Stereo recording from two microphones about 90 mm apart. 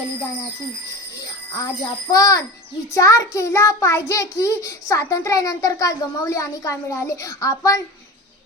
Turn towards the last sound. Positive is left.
turn(degrees=35)  # may be behind; listen again after turning